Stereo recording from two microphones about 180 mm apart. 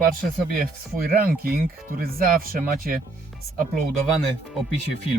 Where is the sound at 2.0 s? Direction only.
55° right (ahead or behind).